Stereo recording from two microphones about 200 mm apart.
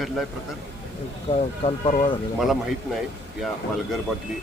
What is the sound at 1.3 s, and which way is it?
Speech, 30° left (ahead or behind).